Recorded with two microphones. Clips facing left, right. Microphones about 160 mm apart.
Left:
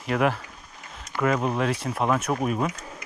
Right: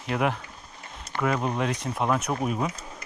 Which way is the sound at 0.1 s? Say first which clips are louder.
Left 3 dB; centre (ahead or behind).